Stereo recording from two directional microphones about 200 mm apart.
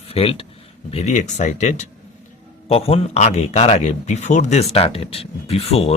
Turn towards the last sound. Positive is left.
turn(degrees=30)  # may be behind; listen again after turning